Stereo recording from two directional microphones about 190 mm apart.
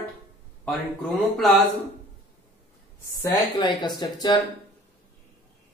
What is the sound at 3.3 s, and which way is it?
Speech, 25° left (ahead or behind).